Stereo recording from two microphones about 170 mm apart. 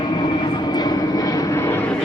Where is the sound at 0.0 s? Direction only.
25° left (ahead or behind).